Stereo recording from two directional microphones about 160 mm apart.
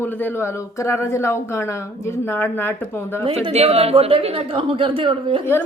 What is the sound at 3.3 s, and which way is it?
A woman's voice, 40° right (ahead or behind).